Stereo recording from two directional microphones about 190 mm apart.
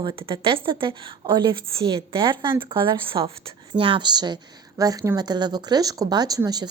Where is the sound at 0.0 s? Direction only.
25° right (ahead or behind).